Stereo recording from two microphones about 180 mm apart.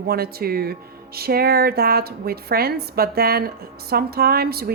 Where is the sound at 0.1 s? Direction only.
60° right (ahead or behind).